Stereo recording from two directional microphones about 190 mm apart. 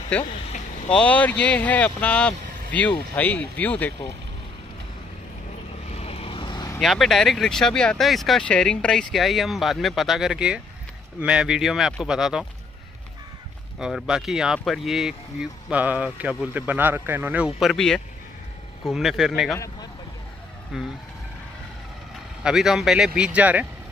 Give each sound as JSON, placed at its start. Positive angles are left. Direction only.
{"t": 0.8, "sound": "speech", "side_deg": 5}
{"t": 5.9, "sound": "vehicle", "side_deg": 30}
{"t": 6.8, "sound": "speech", "side_deg": 0}
{"t": 13.7, "sound": "speech", "side_deg": -5}
{"t": 19.5, "sound": "speech", "side_deg": 15}
{"t": 20.7, "sound": "speech", "side_deg": 0}
{"t": 22.4, "sound": "speech", "side_deg": -5}